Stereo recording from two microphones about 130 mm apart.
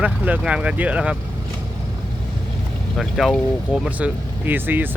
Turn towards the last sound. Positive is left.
turn(degrees=-15)  # may be behind; listen again after turning